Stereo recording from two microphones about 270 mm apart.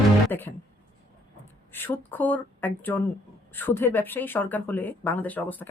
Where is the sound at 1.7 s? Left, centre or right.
Centre.